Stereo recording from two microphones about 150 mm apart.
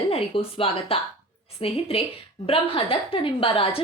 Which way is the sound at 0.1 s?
40° left (ahead or behind).